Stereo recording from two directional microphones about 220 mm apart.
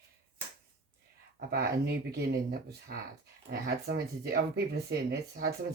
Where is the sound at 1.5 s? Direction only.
45° right (ahead or behind).